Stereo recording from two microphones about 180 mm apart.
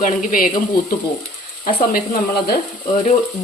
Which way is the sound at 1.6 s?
50° left (ahead or behind).